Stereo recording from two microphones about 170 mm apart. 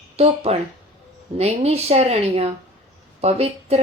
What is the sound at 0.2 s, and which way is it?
Speech, 35° right (ahead or behind).